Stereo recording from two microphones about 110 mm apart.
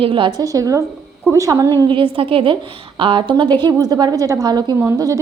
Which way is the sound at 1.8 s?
50° right (ahead or behind).